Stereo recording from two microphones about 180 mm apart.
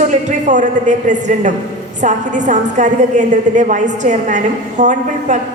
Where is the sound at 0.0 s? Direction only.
45° right (ahead or behind).